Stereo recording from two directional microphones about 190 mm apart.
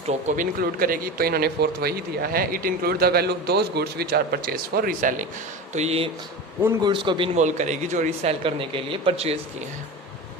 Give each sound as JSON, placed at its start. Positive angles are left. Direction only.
{"t": 0.1, "sound": "speech", "side_deg": -40}
{"t": 5.7, "sound": "a man's voice", "side_deg": -35}
{"t": 7.3, "sound": "speech", "side_deg": -40}